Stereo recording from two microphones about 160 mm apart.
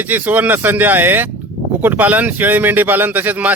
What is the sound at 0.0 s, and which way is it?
Speech, 10° right (ahead or behind).